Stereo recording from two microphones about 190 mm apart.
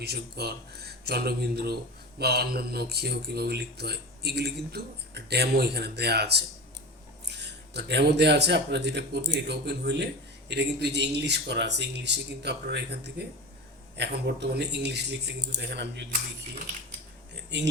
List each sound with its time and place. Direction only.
0.0 s speech: 60° right (ahead or behind)